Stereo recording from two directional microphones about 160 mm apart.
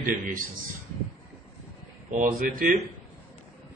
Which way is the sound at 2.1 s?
55° right (ahead or behind).